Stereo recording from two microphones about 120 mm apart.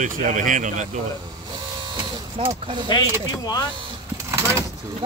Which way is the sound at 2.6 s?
40° right (ahead or behind).